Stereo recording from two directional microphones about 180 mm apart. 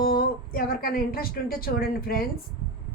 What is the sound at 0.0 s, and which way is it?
A woman's voice, 55° left (ahead or behind).